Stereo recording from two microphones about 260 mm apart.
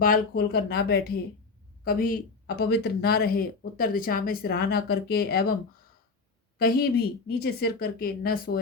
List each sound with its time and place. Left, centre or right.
0.0 s speech: left
6.6 s speech: left